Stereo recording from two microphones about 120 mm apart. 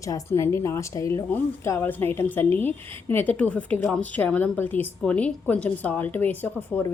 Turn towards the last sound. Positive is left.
turn(degrees=15)  # may be behind; listen again after turning